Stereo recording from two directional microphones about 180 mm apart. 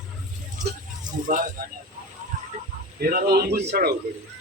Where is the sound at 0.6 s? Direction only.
45° right (ahead or behind).